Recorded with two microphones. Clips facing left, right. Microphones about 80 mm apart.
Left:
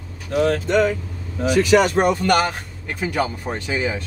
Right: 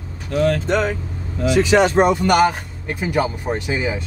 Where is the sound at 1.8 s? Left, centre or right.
Right.